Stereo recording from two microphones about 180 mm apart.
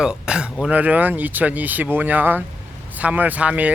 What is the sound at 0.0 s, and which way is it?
Speech, 5° right (ahead or behind).